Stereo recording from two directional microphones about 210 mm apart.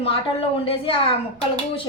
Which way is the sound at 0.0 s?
25° left (ahead or behind).